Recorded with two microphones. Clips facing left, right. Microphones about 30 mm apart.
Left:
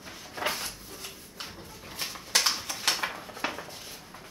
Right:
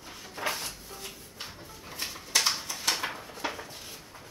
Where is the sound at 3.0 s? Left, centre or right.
Centre.